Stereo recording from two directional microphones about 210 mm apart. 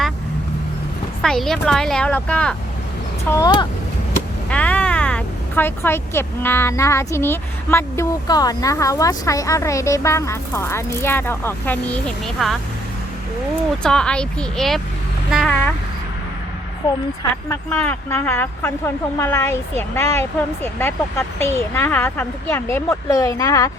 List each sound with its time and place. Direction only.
1.2 s a woman's voice: centre (ahead or behind)
3.2 s speech: 15° left (ahead or behind)
4.4 s speech: 5° left (ahead or behind)
13.8 s a woman's voice: 5° left (ahead or behind)
17.5 s speech: 10° left (ahead or behind)